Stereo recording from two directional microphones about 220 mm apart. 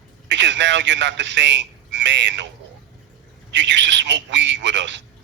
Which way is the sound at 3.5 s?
55° right (ahead or behind).